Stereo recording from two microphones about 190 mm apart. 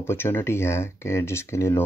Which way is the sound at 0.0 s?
10° left (ahead or behind).